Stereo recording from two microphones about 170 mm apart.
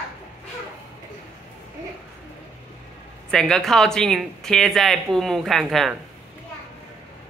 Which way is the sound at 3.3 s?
5° left (ahead or behind).